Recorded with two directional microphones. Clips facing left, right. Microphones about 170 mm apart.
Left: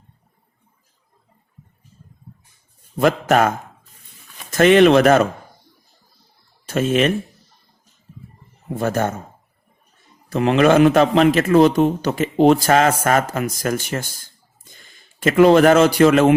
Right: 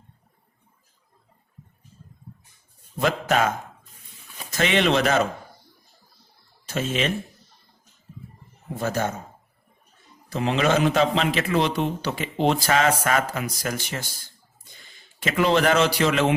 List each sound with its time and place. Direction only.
3.0 s a man's voice: 50° left (ahead or behind)
4.5 s a man's voice: 50° left (ahead or behind)
6.7 s speech: 55° left (ahead or behind)
8.8 s a man's voice: 55° left (ahead or behind)
10.3 s a man's voice: 60° left (ahead or behind)